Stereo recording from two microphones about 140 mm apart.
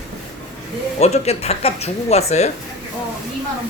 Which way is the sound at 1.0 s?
50° left (ahead or behind).